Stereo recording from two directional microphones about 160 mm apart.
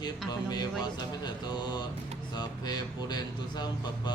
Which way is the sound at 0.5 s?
25° left (ahead or behind).